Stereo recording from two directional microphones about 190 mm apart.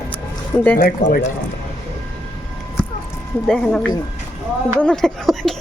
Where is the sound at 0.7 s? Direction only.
50° left (ahead or behind).